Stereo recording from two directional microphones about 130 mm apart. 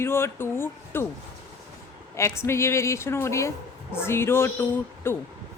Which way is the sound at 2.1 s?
20° left (ahead or behind).